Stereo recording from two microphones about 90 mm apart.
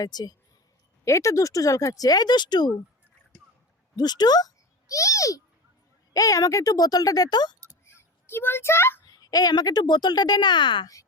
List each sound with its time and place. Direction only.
0.0 s speech: 50° left (ahead or behind)
1.0 s speech: 35° left (ahead or behind); by 2.6 s 55° left (ahead or behind)
3.9 s a child's voice: 50° left (ahead or behind)
7.9 s a sound: 30° left (ahead or behind)
9.0 s speech: 45° left (ahead or behind)